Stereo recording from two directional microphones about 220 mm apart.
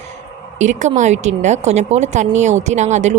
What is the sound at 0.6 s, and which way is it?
Speech, 35° right (ahead or behind).